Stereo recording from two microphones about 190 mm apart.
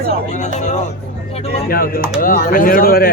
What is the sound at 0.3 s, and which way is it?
Speech, 40° left (ahead or behind).